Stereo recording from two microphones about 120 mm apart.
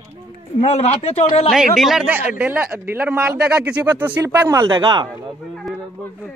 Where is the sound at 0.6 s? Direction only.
60° left (ahead or behind).